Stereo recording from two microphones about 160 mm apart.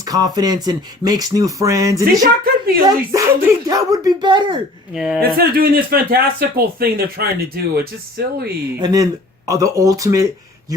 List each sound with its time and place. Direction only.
0.1 s speech: 25° right (ahead or behind)
2.2 s a woman's voice: 65° right (ahead or behind)
2.8 s speech: 20° right (ahead or behind)
4.9 s a woman's voice: centre (ahead or behind)
5.2 s speech: 65° right (ahead or behind)
8.2 s speech: 90° right
8.8 s speech: 25° right (ahead or behind)